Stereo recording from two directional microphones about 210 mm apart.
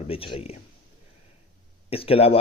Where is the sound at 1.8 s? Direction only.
25° left (ahead or behind).